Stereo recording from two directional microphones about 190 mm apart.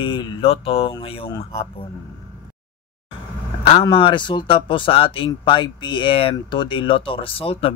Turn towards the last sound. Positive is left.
turn(degrees=30)  # may be behind; listen again after turning